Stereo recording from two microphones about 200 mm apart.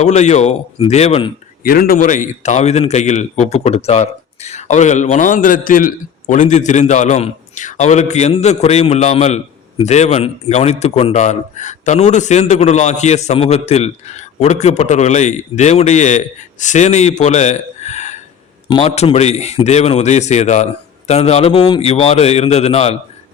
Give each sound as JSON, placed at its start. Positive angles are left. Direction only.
{"t": 0.0, "sound": "a man's voice", "side_deg": 35}
{"t": 1.6, "sound": "a man's voice", "side_deg": 45}